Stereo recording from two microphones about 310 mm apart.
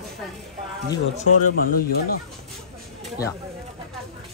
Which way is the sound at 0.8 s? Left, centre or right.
Left.